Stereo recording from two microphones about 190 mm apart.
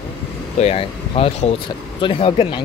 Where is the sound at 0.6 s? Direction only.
30° left (ahead or behind).